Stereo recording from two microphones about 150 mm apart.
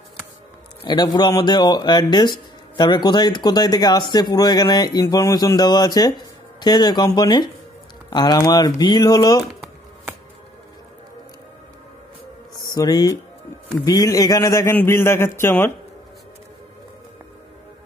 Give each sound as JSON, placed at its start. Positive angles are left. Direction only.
{"t": 0.8, "sound": "speech", "side_deg": 30}
{"t": 12.5, "sound": "a man's voice", "side_deg": 25}